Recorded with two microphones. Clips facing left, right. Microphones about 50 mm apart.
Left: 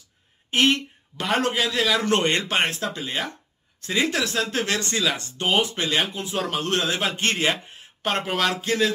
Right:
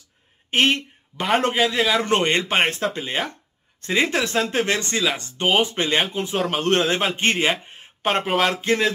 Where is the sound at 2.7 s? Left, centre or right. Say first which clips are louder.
Right 3 dB; right.